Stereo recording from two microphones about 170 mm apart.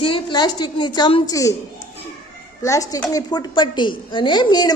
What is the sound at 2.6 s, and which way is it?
A woman's voice, 20° left (ahead or behind).